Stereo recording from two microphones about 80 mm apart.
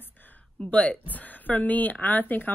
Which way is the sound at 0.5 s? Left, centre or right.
Centre.